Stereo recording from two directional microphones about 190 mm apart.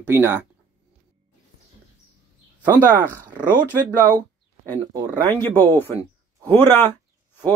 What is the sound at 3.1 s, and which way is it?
Speech, 10° right (ahead or behind).